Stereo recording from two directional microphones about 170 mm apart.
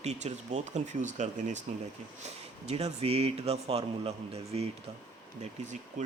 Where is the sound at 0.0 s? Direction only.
40° right (ahead or behind).